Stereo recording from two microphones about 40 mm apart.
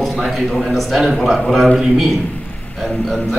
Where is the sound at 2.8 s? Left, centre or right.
Centre.